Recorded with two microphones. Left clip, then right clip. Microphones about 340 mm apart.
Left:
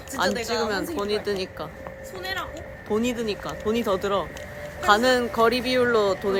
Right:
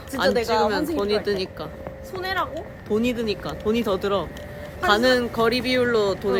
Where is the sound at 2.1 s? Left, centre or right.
Centre.